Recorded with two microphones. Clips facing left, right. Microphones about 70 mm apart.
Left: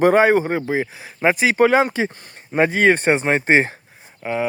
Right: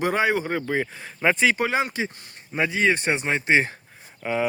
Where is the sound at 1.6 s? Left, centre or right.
Left.